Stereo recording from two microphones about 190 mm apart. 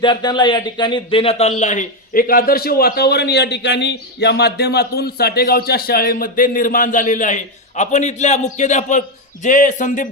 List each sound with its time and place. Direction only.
0.0 s speech: 25° left (ahead or behind); by 10.1 s 45° left (ahead or behind)